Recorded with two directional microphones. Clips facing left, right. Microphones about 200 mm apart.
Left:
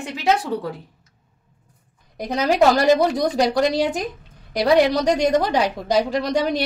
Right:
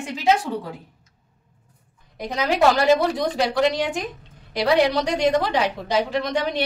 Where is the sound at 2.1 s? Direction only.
40° left (ahead or behind).